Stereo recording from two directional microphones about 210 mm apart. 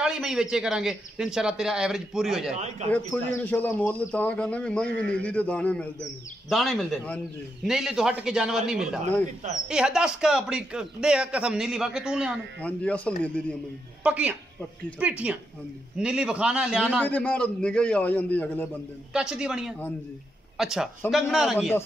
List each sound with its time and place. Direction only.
0.0 s a man's voice: 5° right (ahead or behind)
2.5 s speech: 30° right (ahead or behind)
3.3 s a man's voice: 10° left (ahead or behind)
14.0 s a man's voice: 5° right (ahead or behind)
17.0 s speech: 5° left (ahead or behind)
19.1 s a man's voice: 5° right (ahead or behind)